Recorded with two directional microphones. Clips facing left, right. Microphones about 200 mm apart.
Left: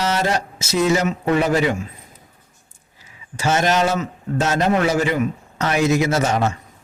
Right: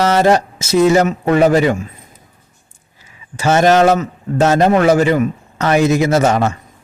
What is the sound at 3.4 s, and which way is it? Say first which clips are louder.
Speech: right 7 dB; 55° right (ahead or behind).